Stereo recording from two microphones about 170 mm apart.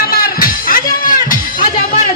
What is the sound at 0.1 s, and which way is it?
Music, 60° left (ahead or behind).